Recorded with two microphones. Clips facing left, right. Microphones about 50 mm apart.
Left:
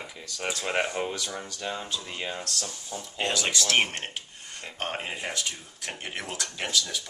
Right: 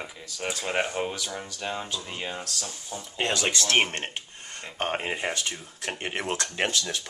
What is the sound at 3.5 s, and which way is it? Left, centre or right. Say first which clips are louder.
Speech: right 1 dB; right.